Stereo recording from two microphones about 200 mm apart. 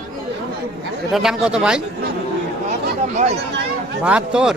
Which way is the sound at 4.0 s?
5° right (ahead or behind).